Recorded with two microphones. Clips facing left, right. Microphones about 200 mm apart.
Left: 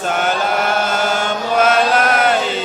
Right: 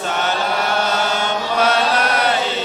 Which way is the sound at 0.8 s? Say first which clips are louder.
Left 2 dB; 50° left (ahead or behind).